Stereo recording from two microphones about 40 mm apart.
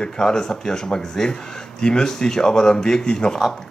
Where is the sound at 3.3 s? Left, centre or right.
Centre.